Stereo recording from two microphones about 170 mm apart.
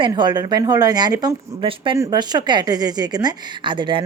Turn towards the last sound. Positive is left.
turn(degrees=-30)  # may be behind; listen again after turning